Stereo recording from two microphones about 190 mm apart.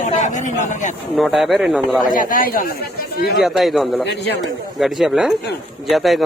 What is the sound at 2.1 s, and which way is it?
Speech, 45° left (ahead or behind).